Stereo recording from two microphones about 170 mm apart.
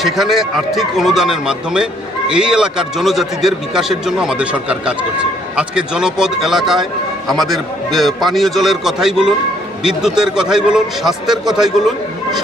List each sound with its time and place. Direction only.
0.0 s a man's voice: centre (ahead or behind)